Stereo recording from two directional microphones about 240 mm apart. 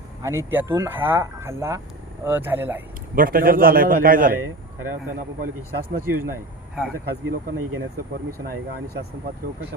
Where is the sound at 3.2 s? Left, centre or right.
Right.